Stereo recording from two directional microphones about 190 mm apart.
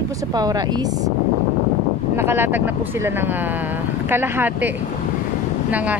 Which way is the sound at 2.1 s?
10° right (ahead or behind).